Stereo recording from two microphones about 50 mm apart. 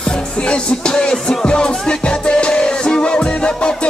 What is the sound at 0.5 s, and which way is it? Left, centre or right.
Music, centre.